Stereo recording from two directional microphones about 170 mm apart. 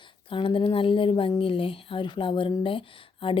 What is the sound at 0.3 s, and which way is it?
Speech, 30° left (ahead or behind).